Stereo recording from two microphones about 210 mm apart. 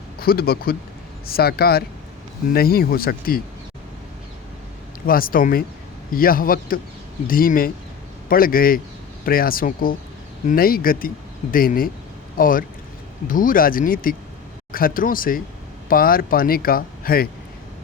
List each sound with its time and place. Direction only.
0.2 s speech: 45° left (ahead or behind)
5.0 s speech: 45° left (ahead or behind)